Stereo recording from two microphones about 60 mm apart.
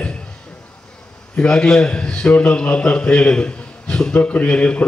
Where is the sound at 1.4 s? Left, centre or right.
Centre.